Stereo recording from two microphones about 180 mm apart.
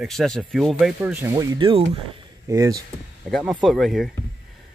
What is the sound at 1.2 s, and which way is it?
Speech, 20° right (ahead or behind).